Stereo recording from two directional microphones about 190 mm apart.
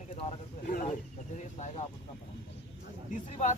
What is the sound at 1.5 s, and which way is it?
Speech, 35° left (ahead or behind).